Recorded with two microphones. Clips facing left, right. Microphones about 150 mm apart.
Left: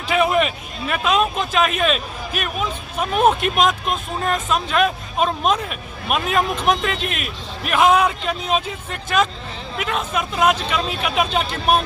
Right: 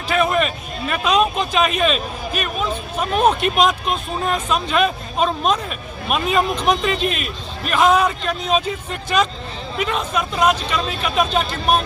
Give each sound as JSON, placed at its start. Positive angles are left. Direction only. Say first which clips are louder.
{"t": 0.1, "sound": "speech", "louder": "left 1 dB", "side_deg": 10}